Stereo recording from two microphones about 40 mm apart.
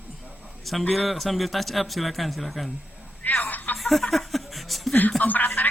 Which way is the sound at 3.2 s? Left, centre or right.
Left.